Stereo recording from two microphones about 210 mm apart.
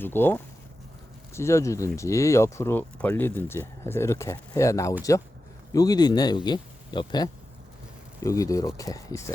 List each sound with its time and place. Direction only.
0.0 s speech: 10° left (ahead or behind)